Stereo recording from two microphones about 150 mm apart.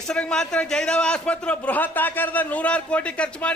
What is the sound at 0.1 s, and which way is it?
A man's voice, 5° left (ahead or behind).